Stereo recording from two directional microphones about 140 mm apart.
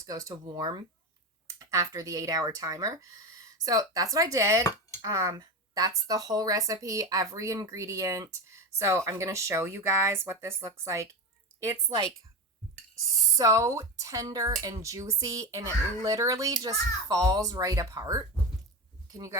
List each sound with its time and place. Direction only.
0.0 s speech: 25° right (ahead or behind)
13.3 s speech: 20° right (ahead or behind)